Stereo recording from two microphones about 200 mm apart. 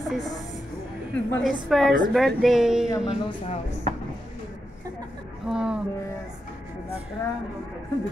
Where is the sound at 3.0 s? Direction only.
30° left (ahead or behind).